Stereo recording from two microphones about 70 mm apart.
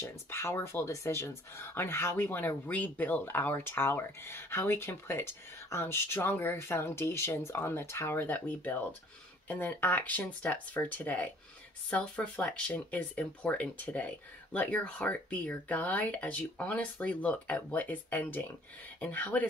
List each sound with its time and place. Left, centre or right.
0.0 s speech: left